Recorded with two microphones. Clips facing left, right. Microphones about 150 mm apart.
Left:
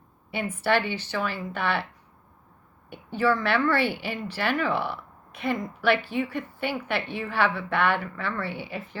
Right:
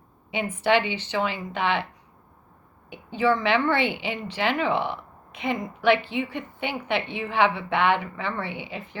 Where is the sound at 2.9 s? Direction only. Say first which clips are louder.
Right 1 dB; 15° right (ahead or behind).